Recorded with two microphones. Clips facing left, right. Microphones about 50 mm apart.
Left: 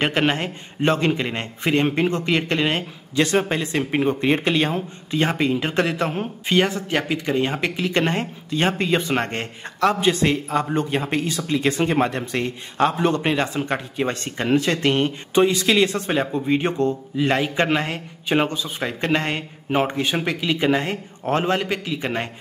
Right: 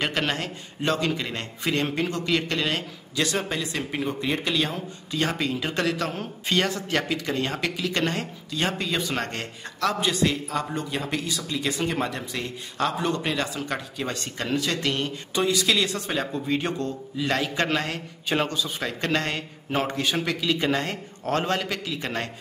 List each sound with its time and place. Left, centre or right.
0.0 s a man's voice: left